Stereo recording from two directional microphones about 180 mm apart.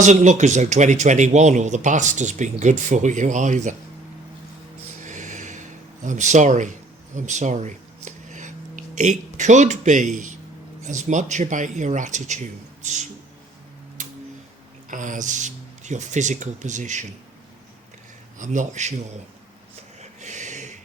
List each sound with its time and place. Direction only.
0.0 s speech: 40° right (ahead or behind)
5.0 s a sound: 40° right (ahead or behind)
10.8 s speech: 45° right (ahead or behind)
14.8 s speech: 45° right (ahead or behind)
18.3 s speech: 45° right (ahead or behind)
20.0 s a sound: 40° right (ahead or behind)